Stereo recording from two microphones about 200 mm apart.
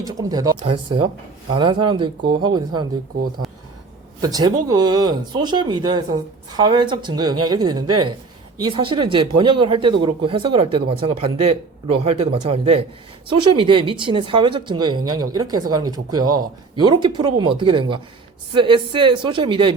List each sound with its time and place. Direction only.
0.0 s speech: 20° right (ahead or behind)
3.4 s a sound: centre (ahead or behind)
4.2 s speech: 20° right (ahead or behind)